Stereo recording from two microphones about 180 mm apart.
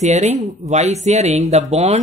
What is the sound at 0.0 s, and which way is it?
Speech, 40° right (ahead or behind).